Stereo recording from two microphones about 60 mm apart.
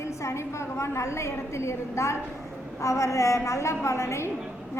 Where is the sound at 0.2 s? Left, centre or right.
Left.